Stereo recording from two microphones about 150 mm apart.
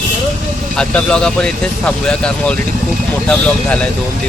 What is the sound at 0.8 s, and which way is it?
Speech, 5° left (ahead or behind).